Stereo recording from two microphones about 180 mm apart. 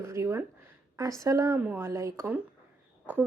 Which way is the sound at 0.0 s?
15° right (ahead or behind).